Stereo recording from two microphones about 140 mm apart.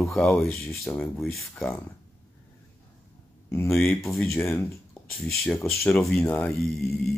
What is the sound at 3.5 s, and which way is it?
Speech, 15° left (ahead or behind).